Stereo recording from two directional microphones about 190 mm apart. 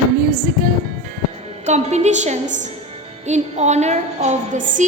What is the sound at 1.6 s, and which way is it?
A woman's voice, 35° right (ahead or behind).